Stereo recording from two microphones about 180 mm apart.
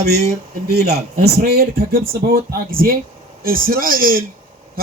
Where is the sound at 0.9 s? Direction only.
60° right (ahead or behind).